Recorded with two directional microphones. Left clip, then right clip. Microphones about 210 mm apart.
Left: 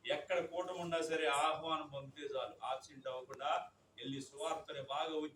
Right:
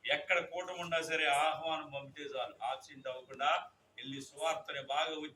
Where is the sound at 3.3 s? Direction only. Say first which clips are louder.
Right 9 dB; 55° left (ahead or behind).